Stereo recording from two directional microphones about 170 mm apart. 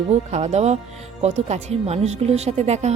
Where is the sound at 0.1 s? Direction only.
40° right (ahead or behind).